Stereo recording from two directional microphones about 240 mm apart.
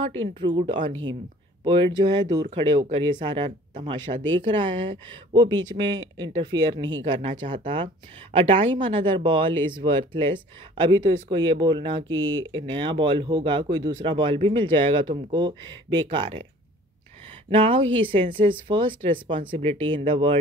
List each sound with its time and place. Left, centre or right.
0.4 s a woman's voice: right
12.1 s speech: right
12.4 s a woman's voice: centre
17.5 s a woman's voice: right